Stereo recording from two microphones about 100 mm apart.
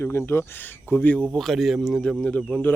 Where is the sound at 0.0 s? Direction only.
25° left (ahead or behind).